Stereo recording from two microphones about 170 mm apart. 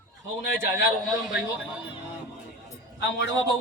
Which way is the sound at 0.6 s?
90° left.